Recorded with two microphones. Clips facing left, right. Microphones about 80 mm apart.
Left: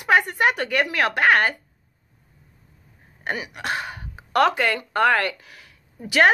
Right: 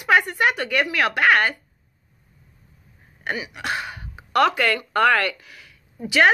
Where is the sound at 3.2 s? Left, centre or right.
Left.